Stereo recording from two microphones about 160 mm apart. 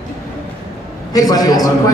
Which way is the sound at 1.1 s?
25° left (ahead or behind).